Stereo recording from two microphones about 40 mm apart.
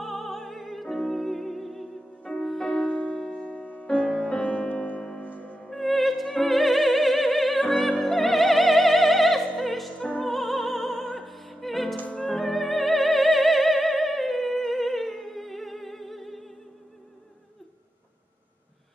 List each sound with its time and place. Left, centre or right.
0.0 s opera: centre
3.2 s music: centre
3.6 s music: left
5.7 s music: centre
7.8 s opera: centre
10.2 s music: centre
12.2 s opera: centre